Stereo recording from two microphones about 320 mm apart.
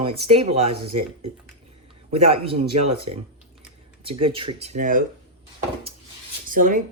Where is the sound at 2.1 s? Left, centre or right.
Centre.